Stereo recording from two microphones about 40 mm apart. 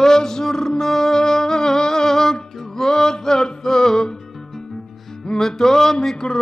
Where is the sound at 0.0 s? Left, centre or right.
Centre.